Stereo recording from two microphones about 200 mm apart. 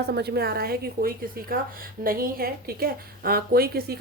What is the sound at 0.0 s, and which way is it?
A woman's voice, 55° right (ahead or behind).